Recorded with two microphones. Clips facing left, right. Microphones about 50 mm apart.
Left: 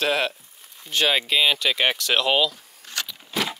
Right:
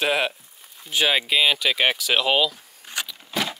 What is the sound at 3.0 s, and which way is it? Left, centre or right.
Keys jangling, centre.